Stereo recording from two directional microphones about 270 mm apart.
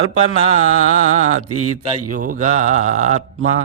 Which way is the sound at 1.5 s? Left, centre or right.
Right.